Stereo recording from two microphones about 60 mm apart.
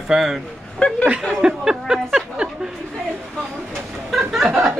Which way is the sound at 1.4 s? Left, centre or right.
Centre.